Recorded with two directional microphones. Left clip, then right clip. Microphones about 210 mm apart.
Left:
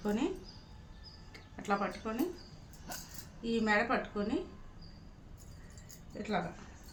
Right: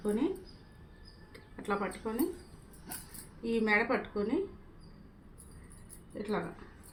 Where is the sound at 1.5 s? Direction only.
15° left (ahead or behind).